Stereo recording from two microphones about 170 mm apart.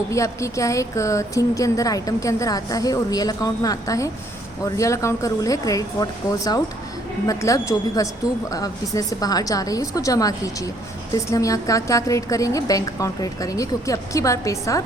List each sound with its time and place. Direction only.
0.1 s a woman's voice: 20° left (ahead or behind)